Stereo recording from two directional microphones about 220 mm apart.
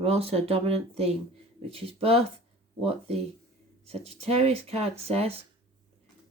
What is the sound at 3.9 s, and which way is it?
Speech, 30° right (ahead or behind).